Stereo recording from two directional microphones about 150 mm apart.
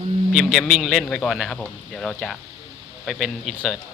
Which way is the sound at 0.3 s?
Centre (ahead or behind).